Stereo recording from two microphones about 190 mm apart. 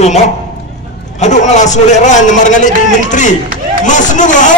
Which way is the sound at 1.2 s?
40° left (ahead or behind).